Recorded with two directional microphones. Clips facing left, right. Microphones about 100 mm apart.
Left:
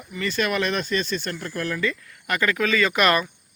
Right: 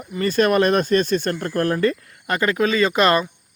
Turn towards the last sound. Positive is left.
turn(degrees=-30)  # may be behind; listen again after turning